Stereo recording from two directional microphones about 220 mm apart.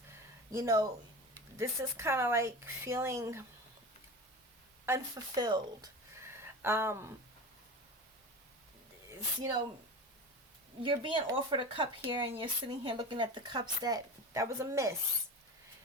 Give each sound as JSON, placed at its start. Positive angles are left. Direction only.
{"t": 0.1, "sound": "a sound", "side_deg": -15}
{"t": 1.5, "sound": "a woman's voice", "side_deg": -10}
{"t": 4.9, "sound": "speech", "side_deg": -15}
{"t": 9.0, "sound": "speech", "side_deg": -15}
{"t": 10.8, "sound": "speech", "side_deg": -20}